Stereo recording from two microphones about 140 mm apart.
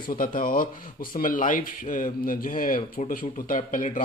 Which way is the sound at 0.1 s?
80° left.